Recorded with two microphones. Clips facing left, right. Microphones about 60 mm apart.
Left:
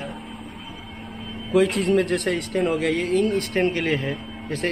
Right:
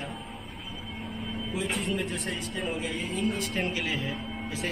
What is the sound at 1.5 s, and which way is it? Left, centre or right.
Speech, left.